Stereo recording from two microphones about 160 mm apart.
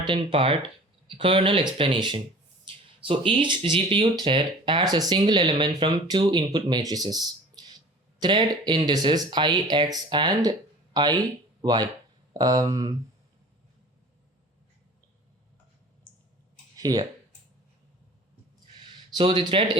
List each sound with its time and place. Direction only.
0.0 s speech: 30° right (ahead or behind)
16.7 s speech: 25° right (ahead or behind)
18.9 s a sound: 30° right (ahead or behind)